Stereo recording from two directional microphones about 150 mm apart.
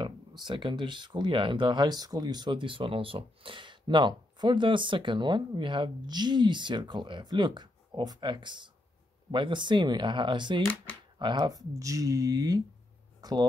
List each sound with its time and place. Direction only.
0.4 s speech: 30° right (ahead or behind)